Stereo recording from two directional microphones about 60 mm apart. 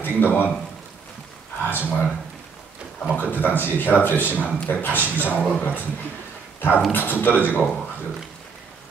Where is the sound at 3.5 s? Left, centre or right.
Left.